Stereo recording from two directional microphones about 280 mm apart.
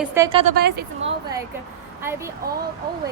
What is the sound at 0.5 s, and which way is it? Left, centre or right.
Speech, right.